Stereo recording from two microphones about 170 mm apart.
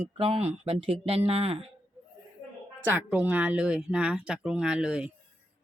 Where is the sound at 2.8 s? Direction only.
10° right (ahead or behind).